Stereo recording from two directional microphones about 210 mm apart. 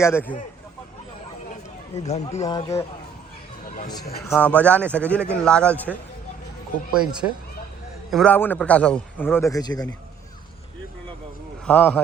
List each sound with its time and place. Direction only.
0.0 s a man's voice: 10° left (ahead or behind)
2.0 s speech: 30° left (ahead or behind)
4.3 s a man's voice: 5° left (ahead or behind)
6.9 s a man's voice: 5° right (ahead or behind); by 9.9 s 20° left (ahead or behind)
11.6 s speech: 5° left (ahead or behind)